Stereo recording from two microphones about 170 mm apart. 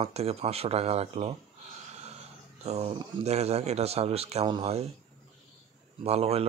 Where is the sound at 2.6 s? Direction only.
40° right (ahead or behind).